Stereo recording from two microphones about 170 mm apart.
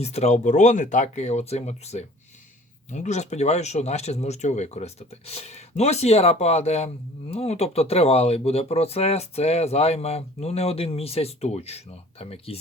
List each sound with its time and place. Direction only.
0.0 s speech: 40° left (ahead or behind)